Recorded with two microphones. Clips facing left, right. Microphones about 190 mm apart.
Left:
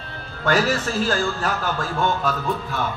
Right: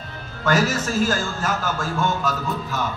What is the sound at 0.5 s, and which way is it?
A man's voice, 45° right (ahead or behind).